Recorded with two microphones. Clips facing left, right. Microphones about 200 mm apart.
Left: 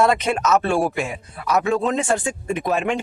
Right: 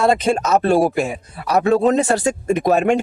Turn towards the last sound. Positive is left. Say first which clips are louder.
# right 6 dB
turn(degrees=-45)  # may be behind; listen again after turning